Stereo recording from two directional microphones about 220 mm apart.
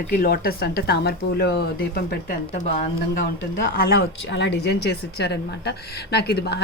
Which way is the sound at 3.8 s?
50° left (ahead or behind).